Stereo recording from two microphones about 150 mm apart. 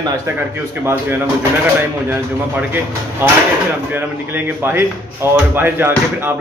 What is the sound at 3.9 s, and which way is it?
Speech, 15° right (ahead or behind).